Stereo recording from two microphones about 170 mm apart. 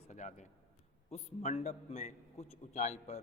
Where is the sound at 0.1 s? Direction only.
45° left (ahead or behind).